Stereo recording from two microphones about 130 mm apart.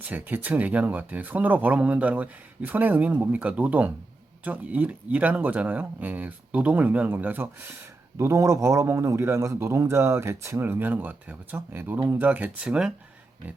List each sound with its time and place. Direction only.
0.0 s a man's voice: 15° right (ahead or behind)
12.2 s speech: 10° right (ahead or behind)